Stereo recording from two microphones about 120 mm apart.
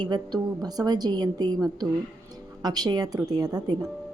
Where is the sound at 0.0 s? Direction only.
35° right (ahead or behind).